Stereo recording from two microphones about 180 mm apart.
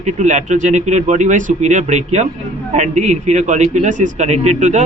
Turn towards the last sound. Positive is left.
turn(degrees=-40)  # may be behind; listen again after turning